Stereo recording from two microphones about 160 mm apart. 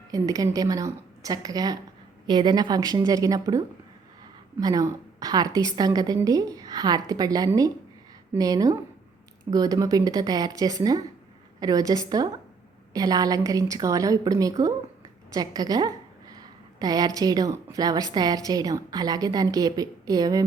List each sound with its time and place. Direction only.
0.1 s a woman's voice: 20° right (ahead or behind)
4.6 s a woman's voice: 25° right (ahead or behind)